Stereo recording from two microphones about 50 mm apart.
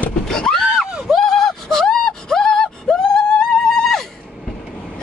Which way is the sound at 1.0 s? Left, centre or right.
Centre.